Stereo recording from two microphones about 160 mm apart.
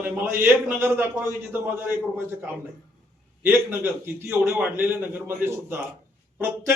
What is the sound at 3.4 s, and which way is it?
Speech, 15° right (ahead or behind).